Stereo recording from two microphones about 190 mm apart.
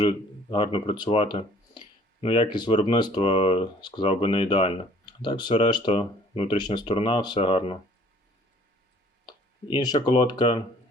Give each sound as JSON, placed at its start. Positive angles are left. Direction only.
{"t": 0.0, "sound": "speech", "side_deg": 25}
{"t": 9.7, "sound": "speech", "side_deg": 25}